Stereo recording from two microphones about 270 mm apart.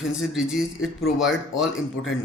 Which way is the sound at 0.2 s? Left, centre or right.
Centre.